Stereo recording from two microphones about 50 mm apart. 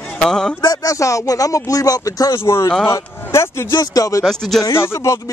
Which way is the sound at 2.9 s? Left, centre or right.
Left.